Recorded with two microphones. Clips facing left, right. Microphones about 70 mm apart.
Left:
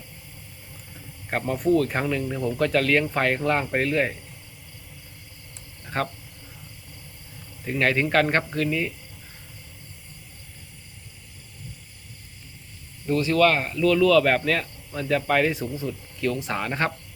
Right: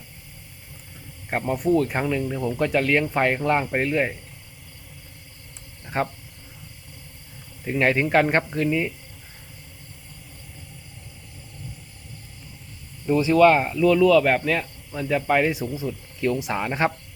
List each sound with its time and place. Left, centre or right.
1.3 s speech: centre
6.0 s speech: centre
7.6 s speech: centre
13.1 s speech: centre